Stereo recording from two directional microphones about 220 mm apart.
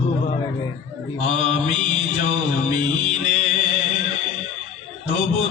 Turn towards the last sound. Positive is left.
turn(degrees=30)  # may be behind; listen again after turning